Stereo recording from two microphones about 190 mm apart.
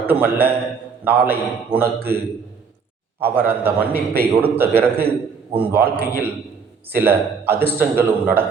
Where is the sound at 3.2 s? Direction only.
10° right (ahead or behind).